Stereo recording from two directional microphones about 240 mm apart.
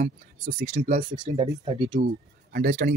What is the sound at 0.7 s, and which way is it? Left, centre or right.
Speech, right.